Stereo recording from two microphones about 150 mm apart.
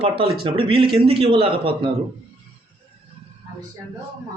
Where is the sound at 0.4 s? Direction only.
35° right (ahead or behind).